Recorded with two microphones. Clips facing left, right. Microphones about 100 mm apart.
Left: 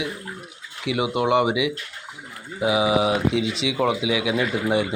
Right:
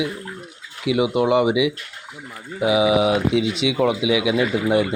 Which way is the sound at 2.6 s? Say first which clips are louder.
Right 3 dB; 30° left (ahead or behind).